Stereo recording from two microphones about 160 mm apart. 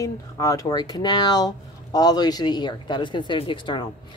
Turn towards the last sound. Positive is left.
turn(degrees=30)  # may be behind; listen again after turning